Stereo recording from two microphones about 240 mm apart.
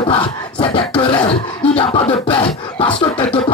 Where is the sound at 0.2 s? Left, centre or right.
Centre.